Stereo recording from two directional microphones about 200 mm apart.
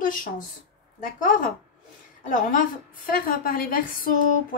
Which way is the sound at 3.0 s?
45° left (ahead or behind).